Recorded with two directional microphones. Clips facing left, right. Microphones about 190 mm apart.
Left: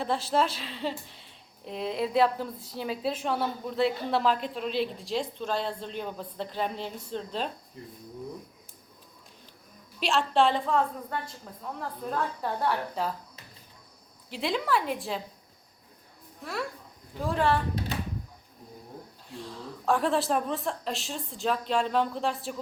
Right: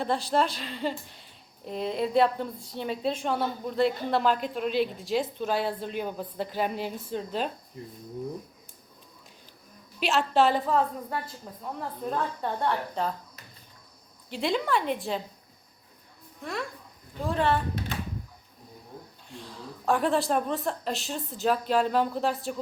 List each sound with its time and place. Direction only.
0.0 s a woman's voice: centre (ahead or behind)
10.0 s a woman's voice: 5° right (ahead or behind)
14.3 s a woman's voice: centre (ahead or behind)
16.4 s a woman's voice: 5° left (ahead or behind)
19.3 s a woman's voice: centre (ahead or behind)